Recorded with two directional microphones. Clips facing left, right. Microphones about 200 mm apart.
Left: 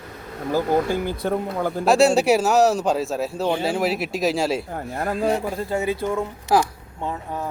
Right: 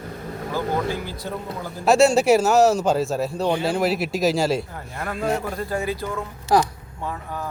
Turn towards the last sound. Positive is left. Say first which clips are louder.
# left 2 dB
turn(degrees=20)  # may be behind; listen again after turning